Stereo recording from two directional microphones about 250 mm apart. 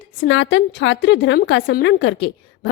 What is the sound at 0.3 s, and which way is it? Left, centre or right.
A woman's voice, left.